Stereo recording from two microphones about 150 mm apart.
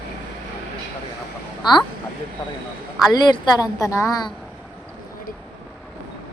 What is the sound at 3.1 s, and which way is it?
A woman's voice, 25° left (ahead or behind).